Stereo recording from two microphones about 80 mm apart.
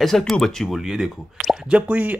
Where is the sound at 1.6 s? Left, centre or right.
Centre.